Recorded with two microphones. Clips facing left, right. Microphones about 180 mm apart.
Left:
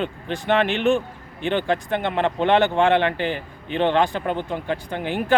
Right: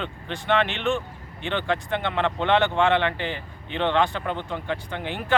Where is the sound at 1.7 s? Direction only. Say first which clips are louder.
Left 3 dB; 40° left (ahead or behind).